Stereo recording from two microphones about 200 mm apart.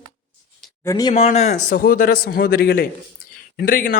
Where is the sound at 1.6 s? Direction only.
45° left (ahead or behind).